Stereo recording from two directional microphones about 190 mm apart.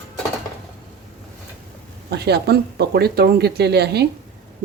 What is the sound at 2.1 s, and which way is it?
Speech, 60° right (ahead or behind).